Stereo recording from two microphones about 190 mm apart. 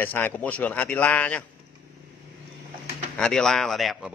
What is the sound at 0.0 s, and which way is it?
Speech, 10° left (ahead or behind).